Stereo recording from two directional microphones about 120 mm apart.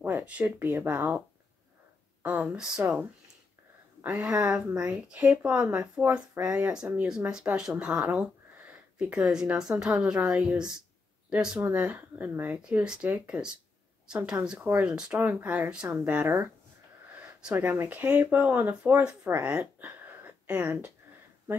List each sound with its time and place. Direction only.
0.0 s speech: 15° right (ahead or behind)
2.2 s speech: 10° right (ahead or behind)
4.0 s speech: 10° right (ahead or behind)